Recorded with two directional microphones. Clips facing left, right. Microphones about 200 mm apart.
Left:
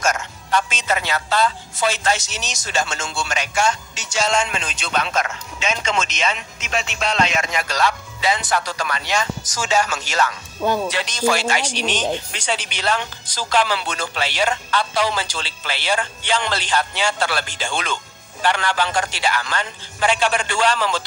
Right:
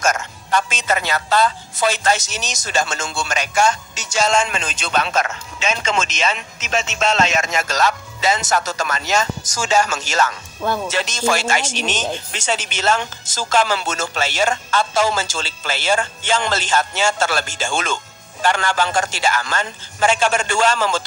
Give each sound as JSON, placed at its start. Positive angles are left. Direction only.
{"t": 0.0, "sound": "speech", "side_deg": -45}
{"t": 7.3, "sound": "speech", "side_deg": -45}
{"t": 10.6, "sound": "speech", "side_deg": 10}
{"t": 10.9, "sound": "speech", "side_deg": -45}